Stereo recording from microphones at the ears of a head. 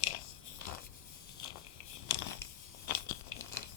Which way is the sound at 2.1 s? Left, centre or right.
Left.